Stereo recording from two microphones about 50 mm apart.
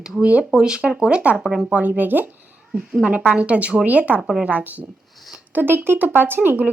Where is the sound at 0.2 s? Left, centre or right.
Right.